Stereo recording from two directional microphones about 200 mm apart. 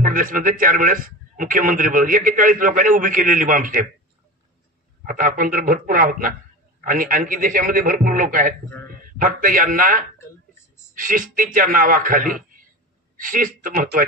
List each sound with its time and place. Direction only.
0.0 s a man's voice: 45° right (ahead or behind)
5.0 s a man's voice: 45° right (ahead or behind)